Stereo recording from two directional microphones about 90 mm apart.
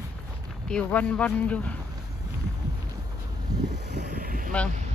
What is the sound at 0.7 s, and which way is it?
Speech, 15° left (ahead or behind).